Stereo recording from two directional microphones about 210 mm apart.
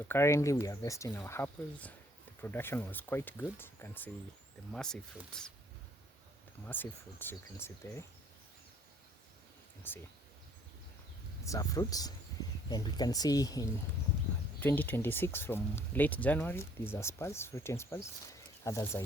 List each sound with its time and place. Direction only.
0.1 s speech: 15° left (ahead or behind)
6.7 s speech: 10° left (ahead or behind)
9.9 s speech: 10° left (ahead or behind)
11.4 s speech: 15° left (ahead or behind)